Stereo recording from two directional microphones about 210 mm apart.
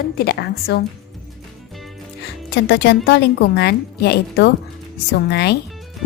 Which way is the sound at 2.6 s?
55° left (ahead or behind).